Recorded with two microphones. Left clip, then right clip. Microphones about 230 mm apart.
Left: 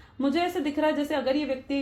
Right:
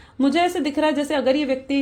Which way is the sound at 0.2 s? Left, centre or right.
Right.